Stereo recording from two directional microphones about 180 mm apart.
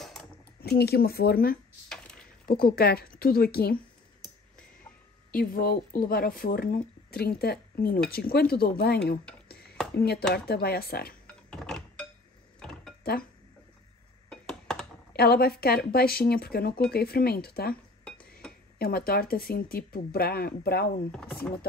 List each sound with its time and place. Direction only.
0.0 s typing: 5° left (ahead or behind)
0.6 s speech: 60° left (ahead or behind)
1.9 s a sound: 5° left (ahead or behind)
2.4 s speech: 55° left (ahead or behind)
5.3 s speech: 50° left (ahead or behind)
11.2 s door: 5° left (ahead or behind)
12.5 s dishes: 5° left (ahead or behind)
14.3 s a sound: 5° left (ahead or behind)
15.1 s speech: 60° left (ahead or behind)
18.8 s speech: 55° left (ahead or behind)
21.1 s chopping: 5° left (ahead or behind)